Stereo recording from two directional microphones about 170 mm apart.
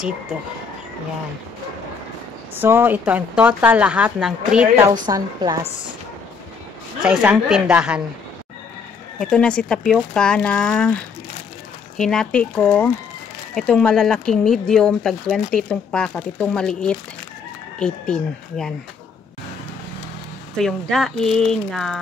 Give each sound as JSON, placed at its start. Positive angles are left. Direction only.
{"t": 2.5, "sound": "speech", "side_deg": -10}
{"t": 5.0, "sound": "a woman's voice", "side_deg": -25}
{"t": 7.0, "sound": "speech", "side_deg": -5}
{"t": 9.2, "sound": "speech", "side_deg": 5}
{"t": 12.0, "sound": "speech", "side_deg": 5}
{"t": 20.5, "sound": "speech", "side_deg": 0}